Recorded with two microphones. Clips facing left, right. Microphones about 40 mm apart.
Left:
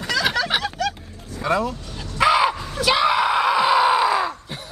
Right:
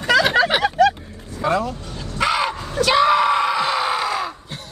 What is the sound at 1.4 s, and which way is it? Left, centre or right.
Speech, centre.